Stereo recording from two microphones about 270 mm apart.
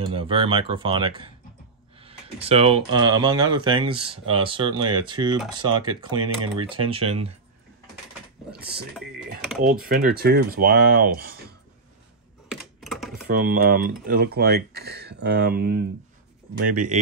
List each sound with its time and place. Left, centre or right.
0.0 s speech: centre
2.4 s speech: right
8.5 s speech: right
12.4 s typing: centre
13.3 s speech: right